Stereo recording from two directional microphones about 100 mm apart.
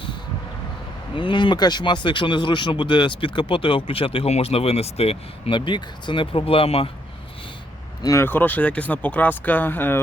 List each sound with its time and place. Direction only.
1.1 s speech: 55° left (ahead or behind); by 5.1 s 90° left
5.5 s speech: 55° left (ahead or behind); by 6.9 s 70° left (ahead or behind)
8.0 s speech: 25° left (ahead or behind)